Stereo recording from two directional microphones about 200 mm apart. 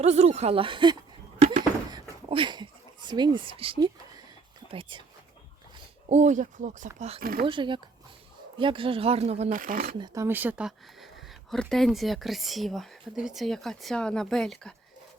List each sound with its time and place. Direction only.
0.0 s speech: 35° right (ahead or behind)
1.4 s a sound: 45° right (ahead or behind)
1.9 s speech: 25° right (ahead or behind)
6.1 s speech: 35° right (ahead or behind)
7.2 s speech: 45° right (ahead or behind)
7.4 s speech: 25° right (ahead or behind); by 9.9 s 45° right (ahead or behind)
10.0 s speech: 15° right (ahead or behind); by 14.8 s 5° left (ahead or behind)